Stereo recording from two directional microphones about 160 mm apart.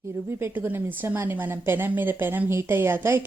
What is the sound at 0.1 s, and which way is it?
A woman's voice, 15° right (ahead or behind).